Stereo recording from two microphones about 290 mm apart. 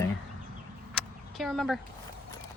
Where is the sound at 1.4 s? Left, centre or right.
Centre.